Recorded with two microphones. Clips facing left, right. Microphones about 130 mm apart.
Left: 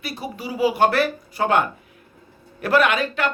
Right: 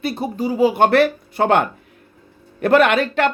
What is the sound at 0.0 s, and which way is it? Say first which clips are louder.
Speech: right 8 dB; 55° right (ahead or behind).